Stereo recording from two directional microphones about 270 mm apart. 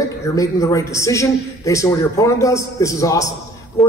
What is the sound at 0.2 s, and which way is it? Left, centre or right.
A man's voice, centre.